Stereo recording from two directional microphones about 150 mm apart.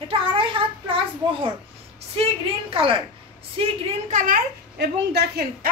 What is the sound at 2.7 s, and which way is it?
A woman's voice, 35° right (ahead or behind).